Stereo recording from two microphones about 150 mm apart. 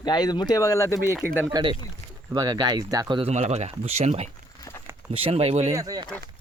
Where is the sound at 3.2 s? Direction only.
50° right (ahead or behind).